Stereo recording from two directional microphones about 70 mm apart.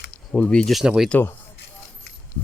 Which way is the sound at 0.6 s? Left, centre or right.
Centre.